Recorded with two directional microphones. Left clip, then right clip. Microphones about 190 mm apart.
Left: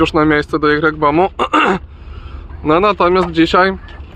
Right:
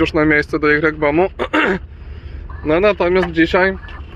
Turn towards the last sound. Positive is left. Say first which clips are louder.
# left 3 dB
turn(degrees=40)  # may be behind; listen again after turning